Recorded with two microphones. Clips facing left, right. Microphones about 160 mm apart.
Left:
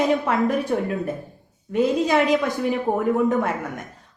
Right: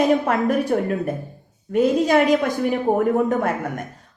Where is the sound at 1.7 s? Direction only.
50° right (ahead or behind).